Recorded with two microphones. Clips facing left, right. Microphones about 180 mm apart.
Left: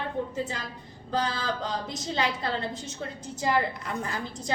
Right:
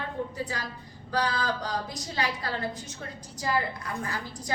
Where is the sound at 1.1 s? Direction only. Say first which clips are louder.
Even; 25° left (ahead or behind).